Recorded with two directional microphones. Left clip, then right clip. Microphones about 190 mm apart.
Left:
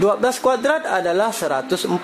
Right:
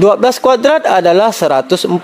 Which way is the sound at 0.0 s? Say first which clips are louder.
Right 8 dB; 35° right (ahead or behind).